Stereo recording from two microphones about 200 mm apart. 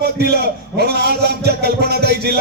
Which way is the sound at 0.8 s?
55° right (ahead or behind).